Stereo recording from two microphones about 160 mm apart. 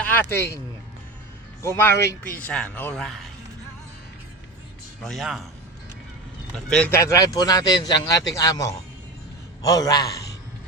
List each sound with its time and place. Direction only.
0.0 s speech: 10° left (ahead or behind)
1.6 s speech: 15° left (ahead or behind)
5.0 s a man's voice: centre (ahead or behind)
6.7 s a man's voice: 5° left (ahead or behind)
6.9 s a man's voice: 20° left (ahead or behind)